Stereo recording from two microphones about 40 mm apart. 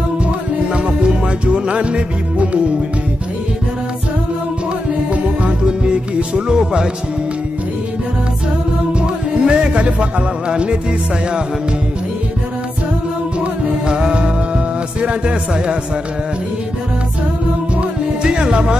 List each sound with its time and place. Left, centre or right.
0.7 s music: right
5.1 s music: right
9.0 s music: right
13.8 s music: right
18.2 s music: right